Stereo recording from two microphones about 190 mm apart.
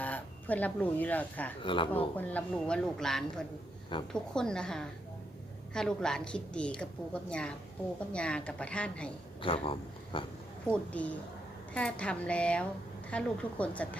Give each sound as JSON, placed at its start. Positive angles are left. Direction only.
{"t": 0.0, "sound": "speech", "side_deg": 10}
{"t": 1.6, "sound": "speech", "side_deg": 25}
{"t": 2.1, "sound": "speech", "side_deg": 10}
{"t": 9.4, "sound": "speech", "side_deg": 25}
{"t": 10.7, "sound": "a woman's voice", "side_deg": 5}